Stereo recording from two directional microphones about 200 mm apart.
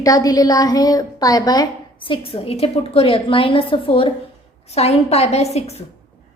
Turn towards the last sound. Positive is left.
turn(degrees=30)  # may be behind; listen again after turning